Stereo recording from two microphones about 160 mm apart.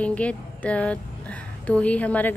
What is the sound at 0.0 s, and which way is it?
A woman's voice, 10° left (ahead or behind).